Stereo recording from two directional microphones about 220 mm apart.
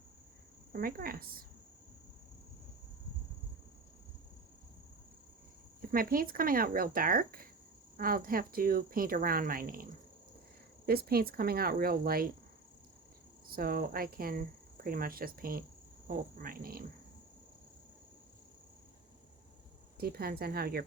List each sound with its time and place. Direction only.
0.7 s speech: 40° right (ahead or behind)
5.9 s speech: 40° right (ahead or behind)
13.5 s speech: 40° right (ahead or behind)
20.0 s speech: 45° right (ahead or behind)